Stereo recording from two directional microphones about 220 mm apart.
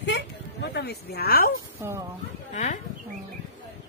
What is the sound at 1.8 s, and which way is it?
Speech, 15° right (ahead or behind).